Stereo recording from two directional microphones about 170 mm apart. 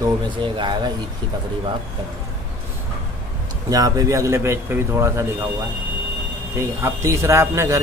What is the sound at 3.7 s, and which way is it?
Speech, 20° right (ahead or behind).